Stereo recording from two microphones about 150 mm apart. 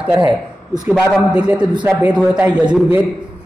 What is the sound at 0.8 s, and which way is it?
A man's voice, 5° right (ahead or behind).